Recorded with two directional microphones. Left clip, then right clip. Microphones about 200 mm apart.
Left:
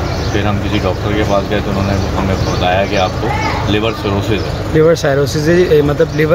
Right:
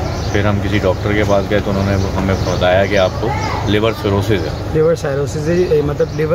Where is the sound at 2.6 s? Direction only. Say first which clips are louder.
Right 1 dB; 25° right (ahead or behind).